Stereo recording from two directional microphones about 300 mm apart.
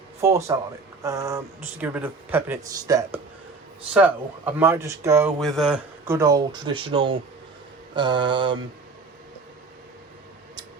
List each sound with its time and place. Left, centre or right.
0.2 s speech: centre